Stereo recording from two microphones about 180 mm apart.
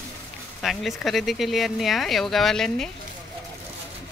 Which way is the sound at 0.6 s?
Centre (ahead or behind).